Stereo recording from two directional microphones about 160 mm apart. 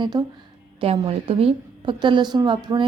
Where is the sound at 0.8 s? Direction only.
35° right (ahead or behind).